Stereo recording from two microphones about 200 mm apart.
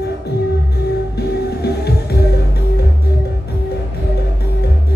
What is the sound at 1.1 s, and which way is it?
Music, 55° left (ahead or behind).